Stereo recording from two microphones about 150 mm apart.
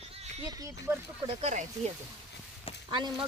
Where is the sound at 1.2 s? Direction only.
50° right (ahead or behind).